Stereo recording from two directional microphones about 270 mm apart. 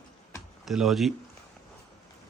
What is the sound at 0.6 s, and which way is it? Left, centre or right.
Speech, centre.